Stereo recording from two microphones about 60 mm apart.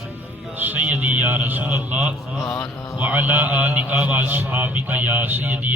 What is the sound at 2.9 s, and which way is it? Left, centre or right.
Mantra, right.